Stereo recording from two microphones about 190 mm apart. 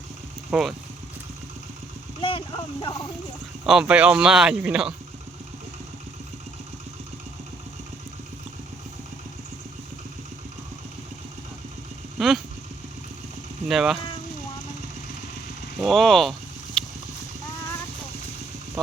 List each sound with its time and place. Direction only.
0.5 s speech: centre (ahead or behind)
2.2 s speech: 25° left (ahead or behind)
3.7 s speech: 5° right (ahead or behind)
12.2 s speech: centre (ahead or behind)
13.7 s speech: centre (ahead or behind)
15.8 s speech: centre (ahead or behind)
16.8 s clip-clop: 5° left (ahead or behind)